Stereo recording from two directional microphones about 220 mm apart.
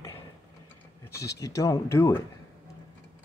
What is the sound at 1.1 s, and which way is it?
Speech, 15° left (ahead or behind).